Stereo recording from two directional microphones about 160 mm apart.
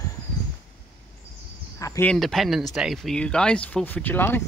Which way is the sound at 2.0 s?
Centre (ahead or behind).